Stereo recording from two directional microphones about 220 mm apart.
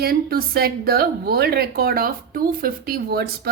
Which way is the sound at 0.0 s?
45° right (ahead or behind).